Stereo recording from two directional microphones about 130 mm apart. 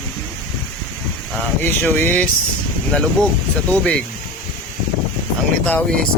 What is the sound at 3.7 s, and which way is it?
Speech, 10° left (ahead or behind).